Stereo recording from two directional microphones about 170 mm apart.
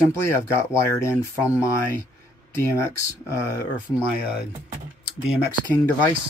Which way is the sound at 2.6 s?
15° left (ahead or behind).